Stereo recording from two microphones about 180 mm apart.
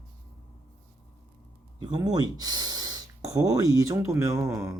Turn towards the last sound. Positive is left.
turn(degrees=-15)  # may be behind; listen again after turning